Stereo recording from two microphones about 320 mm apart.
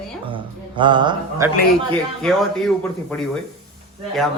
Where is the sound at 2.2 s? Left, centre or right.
Centre.